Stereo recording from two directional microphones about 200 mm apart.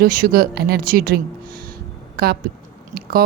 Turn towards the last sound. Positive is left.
turn(degrees=-50)  # may be behind; listen again after turning